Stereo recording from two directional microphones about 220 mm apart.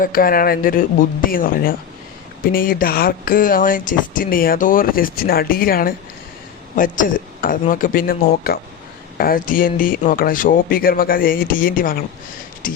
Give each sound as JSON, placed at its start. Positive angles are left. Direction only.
{"t": 0.0, "sound": "speech", "side_deg": 40}